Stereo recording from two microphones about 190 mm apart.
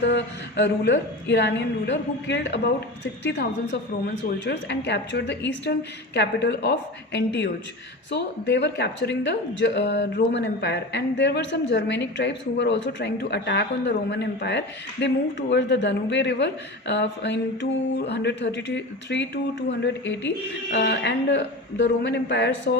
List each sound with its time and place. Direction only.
0.0 s speech: 70° left (ahead or behind)